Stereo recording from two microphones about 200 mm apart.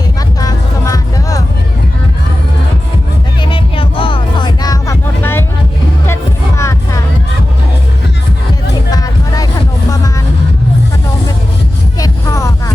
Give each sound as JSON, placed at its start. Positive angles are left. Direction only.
{"t": 0.3, "sound": "music", "side_deg": 20}
{"t": 3.5, "sound": "music", "side_deg": 25}
{"t": 6.6, "sound": "music", "side_deg": 15}
{"t": 8.9, "sound": "music", "side_deg": 20}
{"t": 11.9, "sound": "a sound", "side_deg": 15}